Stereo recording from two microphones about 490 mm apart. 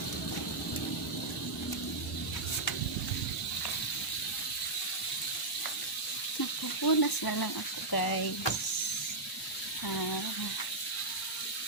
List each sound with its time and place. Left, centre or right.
6.8 s speech: left